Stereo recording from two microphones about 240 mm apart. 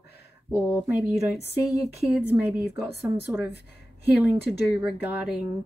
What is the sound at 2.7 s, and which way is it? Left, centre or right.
Speech, left.